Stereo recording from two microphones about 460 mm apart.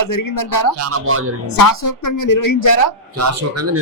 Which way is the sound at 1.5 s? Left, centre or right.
Left.